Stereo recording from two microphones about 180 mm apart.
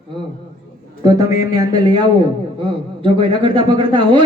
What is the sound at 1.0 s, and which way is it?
A man's voice, 20° right (ahead or behind).